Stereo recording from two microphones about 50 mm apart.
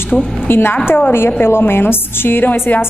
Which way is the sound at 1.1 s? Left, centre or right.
Left.